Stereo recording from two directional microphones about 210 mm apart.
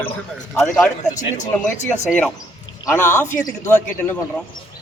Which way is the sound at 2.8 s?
10° left (ahead or behind).